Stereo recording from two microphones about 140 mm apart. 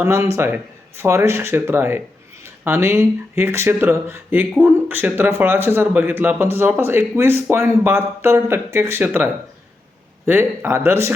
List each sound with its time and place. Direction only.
0.0 s speech: 20° right (ahead or behind)